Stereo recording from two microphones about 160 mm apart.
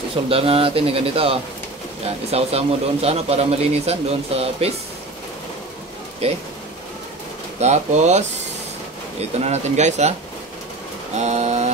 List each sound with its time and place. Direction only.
0.1 s speech: 35° right (ahead or behind)
6.2 s speech: 40° right (ahead or behind)
7.6 s speech: 45° right (ahead or behind)
11.1 s speech: 45° right (ahead or behind)